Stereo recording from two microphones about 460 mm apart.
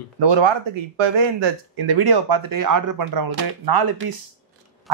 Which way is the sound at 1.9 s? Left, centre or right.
Right.